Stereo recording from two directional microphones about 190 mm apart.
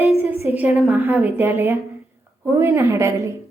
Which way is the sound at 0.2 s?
35° left (ahead or behind).